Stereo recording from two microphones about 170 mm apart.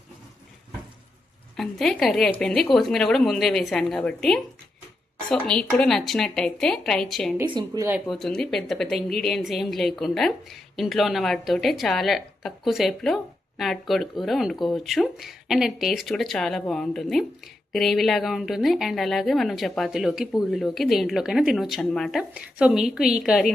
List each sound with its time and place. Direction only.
1.5 s a woman's voice: centre (ahead or behind)
7.5 s speech: 25° right (ahead or behind)
8.1 s a woman's voice: 5° left (ahead or behind)